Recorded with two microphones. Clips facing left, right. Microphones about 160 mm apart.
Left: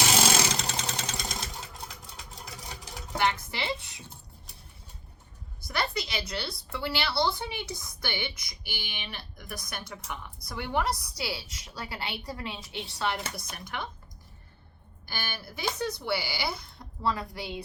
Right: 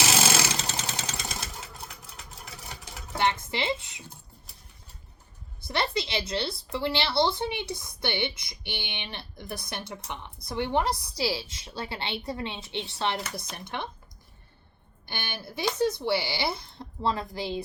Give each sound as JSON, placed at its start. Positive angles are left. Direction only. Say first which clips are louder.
{"t": 0.2, "sound": "a sound", "louder": "even", "side_deg": 0}
{"t": 3.2, "sound": "a woman's voice", "louder": "right 2 dB", "side_deg": -25}
{"t": 5.6, "sound": "a woman's voice", "louder": "right 3 dB", "side_deg": -25}
{"t": 15.0, "sound": "a woman's voice", "louder": "right 1 dB", "side_deg": -20}